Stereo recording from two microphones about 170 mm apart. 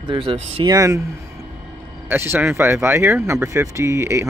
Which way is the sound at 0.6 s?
20° right (ahead or behind).